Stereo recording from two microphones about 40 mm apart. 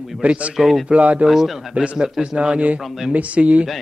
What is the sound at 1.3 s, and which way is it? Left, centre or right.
Speech, centre.